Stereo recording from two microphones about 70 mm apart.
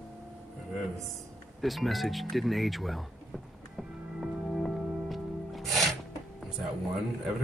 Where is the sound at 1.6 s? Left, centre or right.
Centre.